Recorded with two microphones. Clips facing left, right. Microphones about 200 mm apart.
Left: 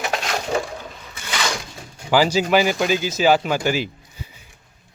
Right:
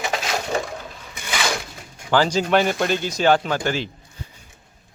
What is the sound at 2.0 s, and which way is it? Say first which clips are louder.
Speech: left 1 dB; 10° left (ahead or behind).